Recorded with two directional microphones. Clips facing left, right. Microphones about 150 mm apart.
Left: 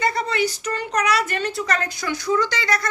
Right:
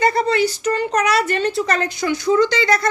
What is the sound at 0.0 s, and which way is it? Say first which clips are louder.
Speech: right 5 dB; 35° right (ahead or behind).